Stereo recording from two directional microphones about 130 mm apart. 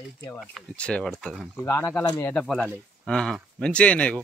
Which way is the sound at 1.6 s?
20° left (ahead or behind).